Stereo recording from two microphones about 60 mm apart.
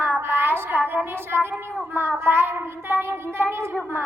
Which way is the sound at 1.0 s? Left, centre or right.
Right.